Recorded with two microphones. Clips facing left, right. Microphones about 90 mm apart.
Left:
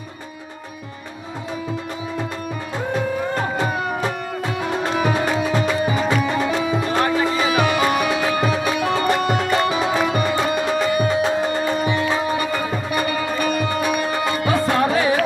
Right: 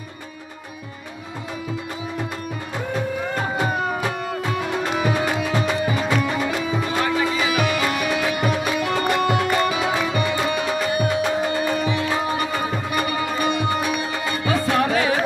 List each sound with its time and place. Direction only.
4.8 s music: 30° left (ahead or behind)
14.3 s music: 25° left (ahead or behind)